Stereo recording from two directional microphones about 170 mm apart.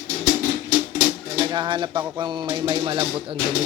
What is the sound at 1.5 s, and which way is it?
Music, 25° right (ahead or behind).